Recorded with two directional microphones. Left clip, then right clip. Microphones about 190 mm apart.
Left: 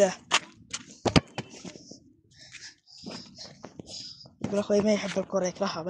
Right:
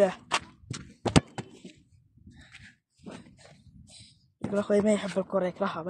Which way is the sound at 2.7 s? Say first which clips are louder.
Left 4 dB; 15° left (ahead or behind).